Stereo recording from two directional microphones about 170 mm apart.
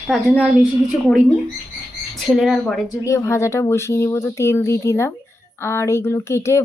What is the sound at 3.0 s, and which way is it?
Speech, 15° left (ahead or behind).